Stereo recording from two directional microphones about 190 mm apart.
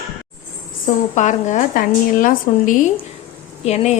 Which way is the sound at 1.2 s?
40° left (ahead or behind).